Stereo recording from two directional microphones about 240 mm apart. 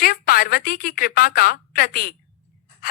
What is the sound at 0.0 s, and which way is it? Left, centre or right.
A woman's voice, left.